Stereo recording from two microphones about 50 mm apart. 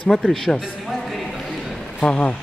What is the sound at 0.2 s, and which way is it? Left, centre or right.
Speech, centre.